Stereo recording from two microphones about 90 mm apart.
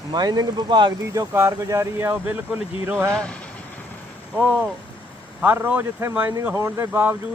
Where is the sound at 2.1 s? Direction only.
15° right (ahead or behind).